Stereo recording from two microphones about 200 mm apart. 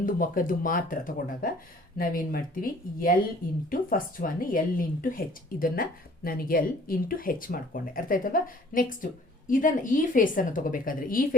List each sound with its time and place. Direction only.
0.0 s a woman's voice: 45° left (ahead or behind)